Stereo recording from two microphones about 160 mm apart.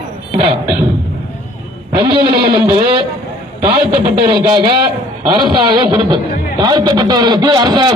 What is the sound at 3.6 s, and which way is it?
A man's voice, 35° right (ahead or behind).